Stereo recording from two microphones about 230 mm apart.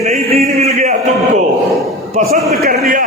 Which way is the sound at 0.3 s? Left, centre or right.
Right.